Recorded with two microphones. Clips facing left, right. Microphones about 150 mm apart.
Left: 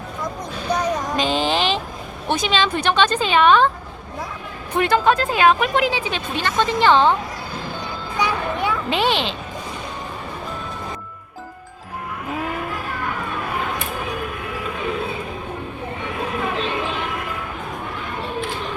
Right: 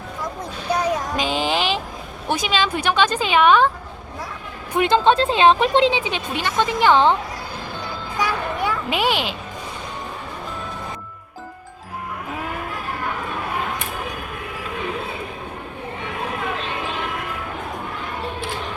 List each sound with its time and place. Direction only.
0.7 s music: 10° right (ahead or behind)
2.3 s a woman's voice: 10° right (ahead or behind)
4.7 s speech: 20° right (ahead or behind)
8.2 s children playing: 5° right (ahead or behind)